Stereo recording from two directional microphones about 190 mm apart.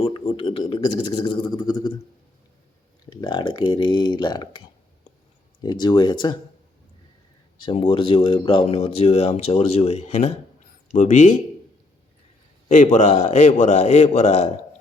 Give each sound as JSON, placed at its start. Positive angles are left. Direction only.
{"t": 0.0, "sound": "speech", "side_deg": 30}
{"t": 3.1, "sound": "speech", "side_deg": 25}
{"t": 5.8, "sound": "speech", "side_deg": 25}
{"t": 7.6, "sound": "speech", "side_deg": 30}
{"t": 12.6, "sound": "speech", "side_deg": 40}